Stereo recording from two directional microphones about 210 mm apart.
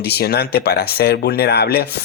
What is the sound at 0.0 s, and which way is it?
Speech, 50° left (ahead or behind).